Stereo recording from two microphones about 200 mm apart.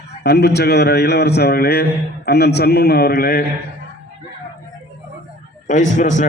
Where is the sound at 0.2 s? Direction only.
55° left (ahead or behind).